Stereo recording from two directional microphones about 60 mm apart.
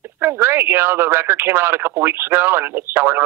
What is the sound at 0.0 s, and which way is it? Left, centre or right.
Speech, right.